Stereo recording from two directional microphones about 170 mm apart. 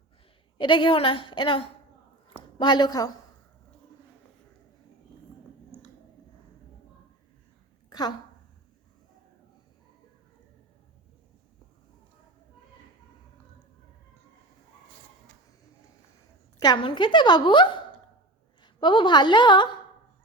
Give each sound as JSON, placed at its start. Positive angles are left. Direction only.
{"t": 0.6, "sound": "a woman's voice", "side_deg": 30}
{"t": 7.9, "sound": "a sound", "side_deg": 25}
{"t": 16.6, "sound": "a woman's voice", "side_deg": 25}